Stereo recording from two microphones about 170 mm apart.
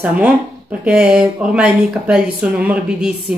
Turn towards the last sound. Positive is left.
turn(degrees=-5)  # may be behind; listen again after turning